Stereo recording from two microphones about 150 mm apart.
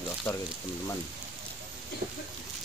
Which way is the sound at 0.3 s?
15° left (ahead or behind).